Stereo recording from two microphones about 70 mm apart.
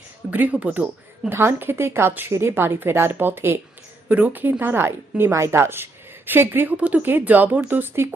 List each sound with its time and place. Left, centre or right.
0.3 s speech: right
1.3 s a woman's voice: right
6.7 s speech: centre
7.0 s a woman's voice: right